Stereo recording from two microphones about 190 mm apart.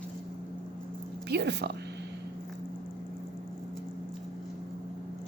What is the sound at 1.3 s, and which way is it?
Speech, 60° right (ahead or behind).